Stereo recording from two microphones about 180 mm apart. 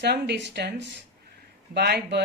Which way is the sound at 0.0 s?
70° right (ahead or behind).